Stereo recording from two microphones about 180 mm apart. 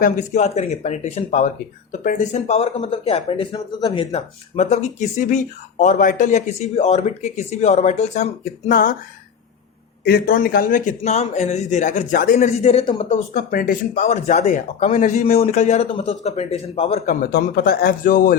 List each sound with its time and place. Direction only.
0.0 s speech: 40° left (ahead or behind)
10.0 s speech: 60° left (ahead or behind); by 13.1 s 30° left (ahead or behind)
13.1 s speech: 45° left (ahead or behind)
17.3 s speech: 55° left (ahead or behind)